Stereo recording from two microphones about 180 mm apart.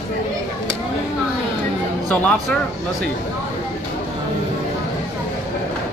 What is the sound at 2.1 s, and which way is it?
Speech, 5° left (ahead or behind).